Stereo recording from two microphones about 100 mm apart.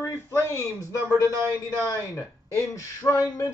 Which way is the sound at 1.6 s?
35° left (ahead or behind).